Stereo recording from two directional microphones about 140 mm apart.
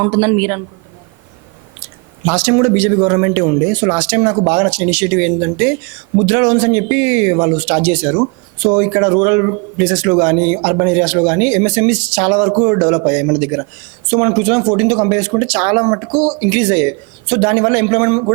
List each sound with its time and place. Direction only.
0.0 s speech: 20° right (ahead or behind)
2.3 s speech: 15° right (ahead or behind)